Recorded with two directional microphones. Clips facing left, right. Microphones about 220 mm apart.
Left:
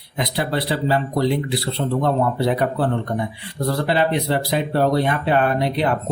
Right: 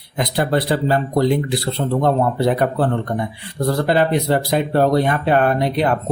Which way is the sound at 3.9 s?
45° right (ahead or behind).